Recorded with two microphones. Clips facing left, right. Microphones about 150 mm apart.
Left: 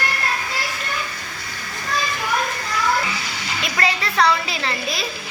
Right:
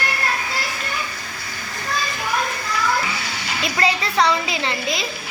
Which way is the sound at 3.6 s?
25° right (ahead or behind).